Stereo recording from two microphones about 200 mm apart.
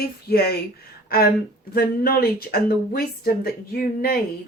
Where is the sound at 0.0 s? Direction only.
50° left (ahead or behind).